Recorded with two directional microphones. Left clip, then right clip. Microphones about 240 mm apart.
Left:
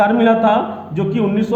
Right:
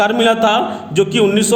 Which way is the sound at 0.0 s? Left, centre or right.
Right.